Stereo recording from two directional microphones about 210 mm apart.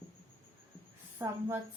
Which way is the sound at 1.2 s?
10° right (ahead or behind).